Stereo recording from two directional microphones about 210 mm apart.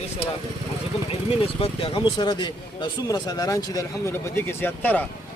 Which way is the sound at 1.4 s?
25° left (ahead or behind).